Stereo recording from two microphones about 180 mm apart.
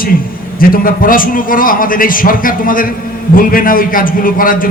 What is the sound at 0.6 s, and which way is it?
A man's voice, 55° left (ahead or behind).